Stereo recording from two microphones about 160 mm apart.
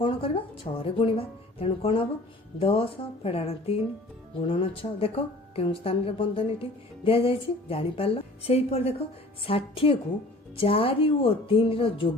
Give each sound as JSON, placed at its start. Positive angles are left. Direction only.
{"t": 0.0, "sound": "speech", "side_deg": 35}